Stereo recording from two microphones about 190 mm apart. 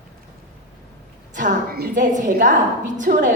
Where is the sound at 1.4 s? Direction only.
50° right (ahead or behind).